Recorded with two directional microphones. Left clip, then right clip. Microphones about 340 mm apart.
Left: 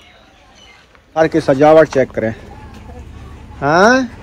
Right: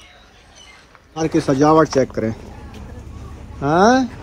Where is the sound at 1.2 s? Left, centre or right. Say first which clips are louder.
Left 4 dB; centre.